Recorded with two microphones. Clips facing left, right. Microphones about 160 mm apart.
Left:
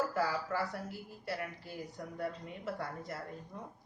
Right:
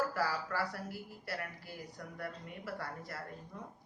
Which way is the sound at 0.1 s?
20° left (ahead or behind).